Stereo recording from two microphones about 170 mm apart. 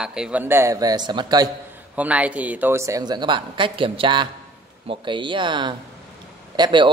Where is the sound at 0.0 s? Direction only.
5° right (ahead or behind); by 1.5 s 25° right (ahead or behind).